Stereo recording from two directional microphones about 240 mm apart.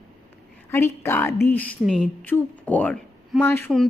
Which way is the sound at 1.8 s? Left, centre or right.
Centre.